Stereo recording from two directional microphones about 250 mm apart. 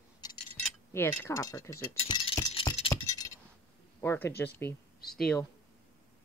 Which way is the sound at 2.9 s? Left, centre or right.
Centre.